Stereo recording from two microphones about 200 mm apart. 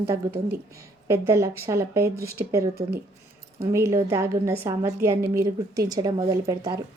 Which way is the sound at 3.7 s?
15° right (ahead or behind).